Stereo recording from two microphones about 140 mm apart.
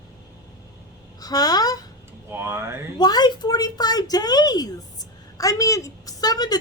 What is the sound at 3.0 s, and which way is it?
A woman's voice, 30° left (ahead or behind).